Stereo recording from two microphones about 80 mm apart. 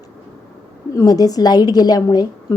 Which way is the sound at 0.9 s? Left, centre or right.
Left.